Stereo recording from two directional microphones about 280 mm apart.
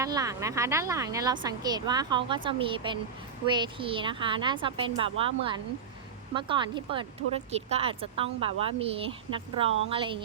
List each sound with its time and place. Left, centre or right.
0.0 s speech: centre